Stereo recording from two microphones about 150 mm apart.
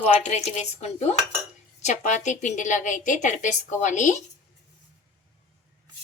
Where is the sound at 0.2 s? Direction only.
50° left (ahead or behind).